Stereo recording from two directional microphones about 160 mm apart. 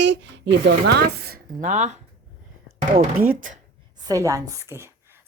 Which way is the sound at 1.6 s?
50° right (ahead or behind).